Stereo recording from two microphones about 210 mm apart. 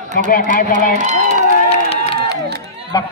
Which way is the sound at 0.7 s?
35° right (ahead or behind).